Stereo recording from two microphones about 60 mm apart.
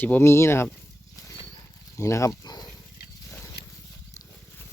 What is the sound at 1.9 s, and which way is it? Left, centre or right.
Speech, left.